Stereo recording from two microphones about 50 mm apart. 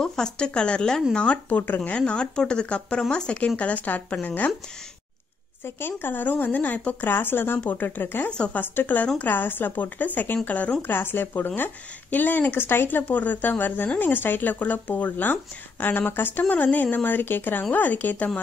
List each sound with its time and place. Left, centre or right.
0.0 s speech: centre
1.5 s speech: left
1.9 s speech: left
5.8 s speech: left
7.1 s speech: left
10.8 s speech: left